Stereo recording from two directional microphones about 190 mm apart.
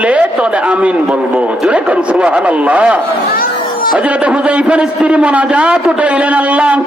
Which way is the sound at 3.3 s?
50° left (ahead or behind).